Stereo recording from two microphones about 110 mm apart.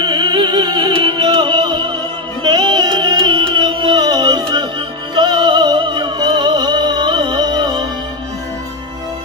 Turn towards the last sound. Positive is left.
turn(degrees=-45)  # may be behind; listen again after turning